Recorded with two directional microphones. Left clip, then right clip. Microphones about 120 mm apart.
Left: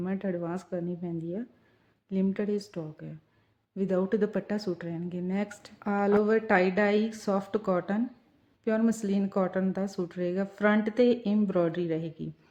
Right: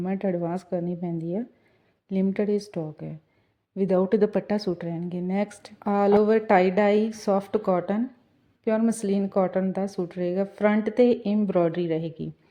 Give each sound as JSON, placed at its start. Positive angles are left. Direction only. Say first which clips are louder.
{"t": 0.0, "sound": "a woman's voice", "louder": "right 6 dB", "side_deg": -35}